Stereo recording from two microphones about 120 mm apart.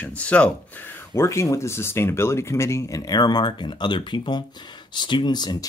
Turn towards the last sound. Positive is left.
turn(degrees=35)  # may be behind; listen again after turning